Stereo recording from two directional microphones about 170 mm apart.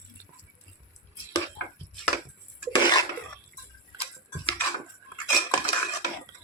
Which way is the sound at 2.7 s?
25° left (ahead or behind).